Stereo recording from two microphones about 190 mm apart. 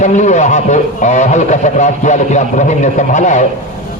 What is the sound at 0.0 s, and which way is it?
A man's voice, 40° left (ahead or behind).